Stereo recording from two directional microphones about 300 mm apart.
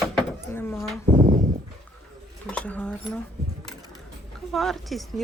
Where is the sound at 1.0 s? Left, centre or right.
Right.